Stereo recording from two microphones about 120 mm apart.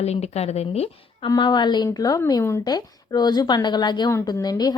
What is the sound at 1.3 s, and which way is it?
A woman's voice, 35° left (ahead or behind).